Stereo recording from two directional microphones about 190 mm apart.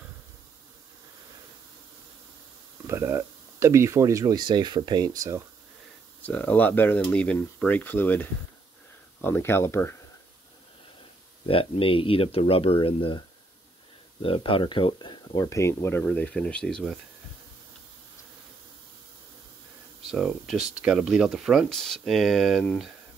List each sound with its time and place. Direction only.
2.9 s speech: 15° right (ahead or behind)
6.2 s speech: 10° left (ahead or behind)
11.4 s speech: 30° left (ahead or behind)
14.2 s speech: 30° left (ahead or behind); by 16.9 s 5° left (ahead or behind)
20.1 s speech: centre (ahead or behind)